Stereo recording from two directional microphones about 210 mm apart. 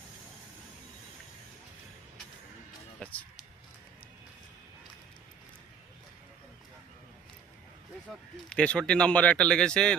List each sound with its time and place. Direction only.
8.4 s speech: 5° left (ahead or behind)